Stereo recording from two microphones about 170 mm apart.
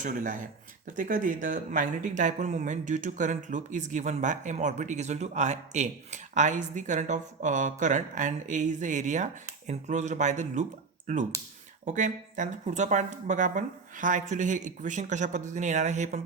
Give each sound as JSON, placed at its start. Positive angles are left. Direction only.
{"t": 0.0, "sound": "speech", "side_deg": -50}